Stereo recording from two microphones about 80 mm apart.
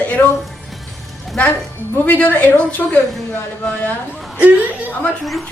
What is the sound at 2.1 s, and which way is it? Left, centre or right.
Speech, centre.